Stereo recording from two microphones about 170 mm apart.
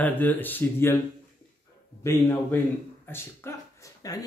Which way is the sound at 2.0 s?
15° left (ahead or behind).